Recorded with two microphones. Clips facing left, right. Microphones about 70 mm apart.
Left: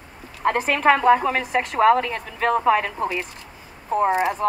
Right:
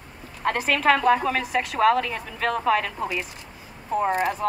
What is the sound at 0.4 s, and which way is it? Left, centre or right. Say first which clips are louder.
Speech: left 3 dB; centre.